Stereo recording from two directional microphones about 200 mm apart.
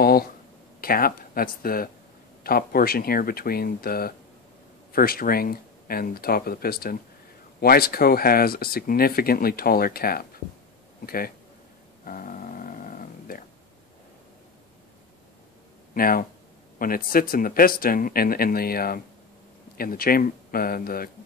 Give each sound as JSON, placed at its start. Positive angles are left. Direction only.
{"t": 0.7, "sound": "speech", "side_deg": 45}
{"t": 12.0, "sound": "dog", "side_deg": 45}
{"t": 15.9, "sound": "speech", "side_deg": 45}